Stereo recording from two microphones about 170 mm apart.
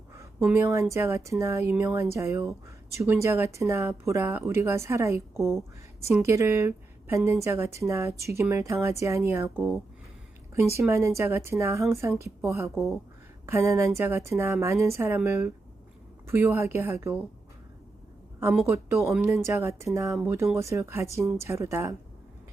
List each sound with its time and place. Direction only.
0.4 s speech: 15° right (ahead or behind)
18.6 s speech: 15° right (ahead or behind)